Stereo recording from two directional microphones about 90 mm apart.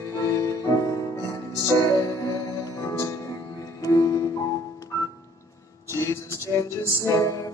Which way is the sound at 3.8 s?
40° left (ahead or behind).